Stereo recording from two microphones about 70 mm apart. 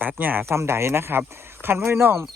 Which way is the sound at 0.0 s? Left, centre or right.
Right.